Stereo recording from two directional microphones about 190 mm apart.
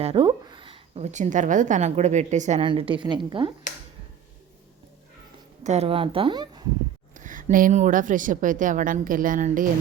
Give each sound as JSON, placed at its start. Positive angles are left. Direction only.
{"t": 0.0, "sound": "a woman's voice", "side_deg": -30}
{"t": 2.6, "sound": "speech", "side_deg": -25}
{"t": 5.6, "sound": "speech", "side_deg": -35}
{"t": 7.1, "sound": "a woman's voice", "side_deg": -40}